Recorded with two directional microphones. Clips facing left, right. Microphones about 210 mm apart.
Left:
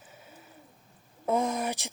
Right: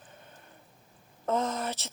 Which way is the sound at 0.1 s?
5° left (ahead or behind).